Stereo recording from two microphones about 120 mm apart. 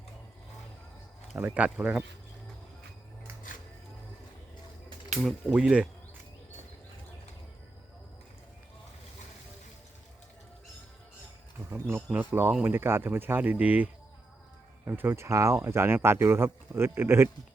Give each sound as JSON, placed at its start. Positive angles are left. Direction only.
{"t": 1.4, "sound": "speech", "side_deg": -10}
{"t": 5.2, "sound": "speech", "side_deg": -5}
{"t": 11.7, "sound": "speech", "side_deg": -20}